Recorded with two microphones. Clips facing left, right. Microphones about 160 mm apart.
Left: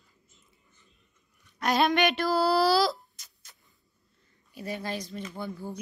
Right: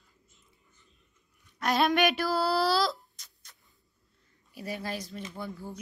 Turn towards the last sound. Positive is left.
turn(degrees=0)  # may be behind; listen again after turning